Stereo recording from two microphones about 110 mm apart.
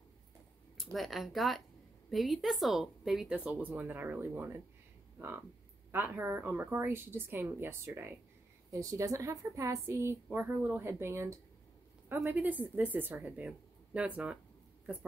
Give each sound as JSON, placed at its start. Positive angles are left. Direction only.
{"t": 0.7, "sound": "a woman's voice", "side_deg": 0}
{"t": 3.3, "sound": "speech", "side_deg": -15}
{"t": 5.9, "sound": "a woman's voice", "side_deg": -20}